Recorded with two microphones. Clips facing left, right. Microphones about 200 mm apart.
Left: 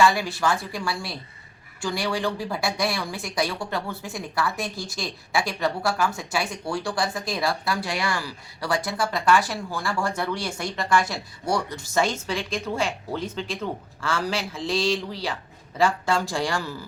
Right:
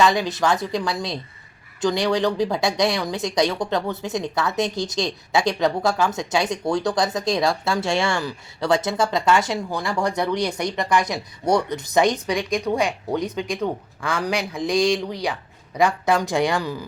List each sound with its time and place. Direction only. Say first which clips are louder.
0.0 s speech: right 2 dB; 20° right (ahead or behind)